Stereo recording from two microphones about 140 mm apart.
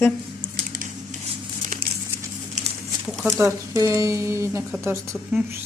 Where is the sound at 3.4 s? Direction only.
20° right (ahead or behind).